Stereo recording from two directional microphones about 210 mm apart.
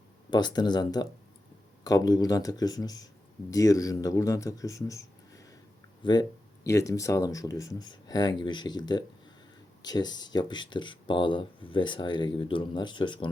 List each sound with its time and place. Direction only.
0.3 s speech: 20° left (ahead or behind)